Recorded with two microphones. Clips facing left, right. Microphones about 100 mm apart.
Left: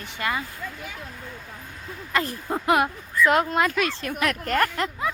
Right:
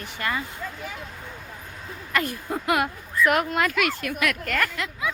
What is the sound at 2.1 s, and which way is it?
Speech, 25° left (ahead or behind).